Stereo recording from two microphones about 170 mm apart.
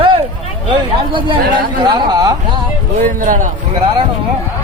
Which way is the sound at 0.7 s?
30° right (ahead or behind).